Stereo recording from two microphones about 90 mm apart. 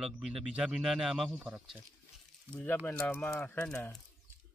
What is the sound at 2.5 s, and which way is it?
Speech, 15° left (ahead or behind).